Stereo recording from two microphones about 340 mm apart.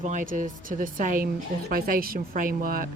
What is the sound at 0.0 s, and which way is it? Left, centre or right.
A woman's voice, right.